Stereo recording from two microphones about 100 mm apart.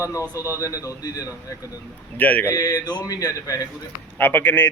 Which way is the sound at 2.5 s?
35° left (ahead or behind).